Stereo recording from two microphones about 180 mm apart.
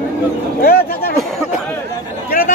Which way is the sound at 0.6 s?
60° left (ahead or behind).